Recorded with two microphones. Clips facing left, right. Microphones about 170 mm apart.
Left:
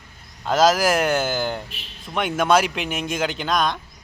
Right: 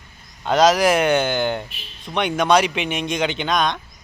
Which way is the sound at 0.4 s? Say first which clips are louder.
Right 2 dB; centre (ahead or behind).